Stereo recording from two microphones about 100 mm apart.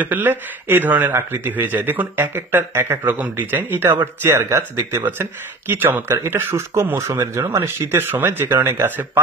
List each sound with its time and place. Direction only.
0.0 s speech: 20° right (ahead or behind)